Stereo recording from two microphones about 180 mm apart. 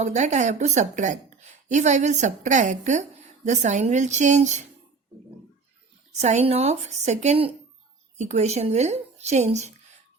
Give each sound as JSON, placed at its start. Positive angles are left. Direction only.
{"t": 0.0, "sound": "a woman's voice", "side_deg": -40}
{"t": 6.1, "sound": "a woman's voice", "side_deg": -40}